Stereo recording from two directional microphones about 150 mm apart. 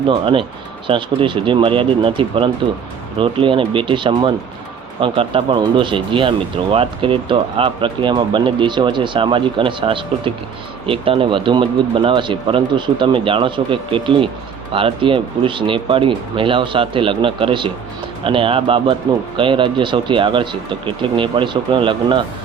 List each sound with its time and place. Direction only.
0.1 s speech: 35° right (ahead or behind)